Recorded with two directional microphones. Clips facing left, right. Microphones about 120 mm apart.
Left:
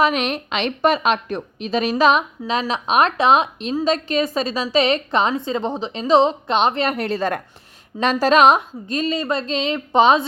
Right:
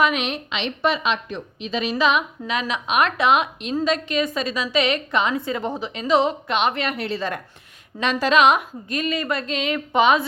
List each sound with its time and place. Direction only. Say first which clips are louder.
0.0 s a woman's voice: left 2 dB; 40° left (ahead or behind)
6.9 s a woman's voice: left 4 dB; 45° left (ahead or behind); by 10.2 s 30° left (ahead or behind)